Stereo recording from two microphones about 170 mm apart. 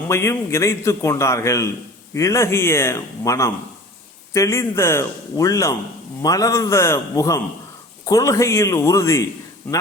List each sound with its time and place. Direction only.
0.1 s a man's voice: 15° left (ahead or behind)